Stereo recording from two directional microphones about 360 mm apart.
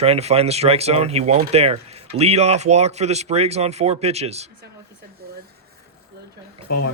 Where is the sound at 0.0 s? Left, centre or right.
Centre.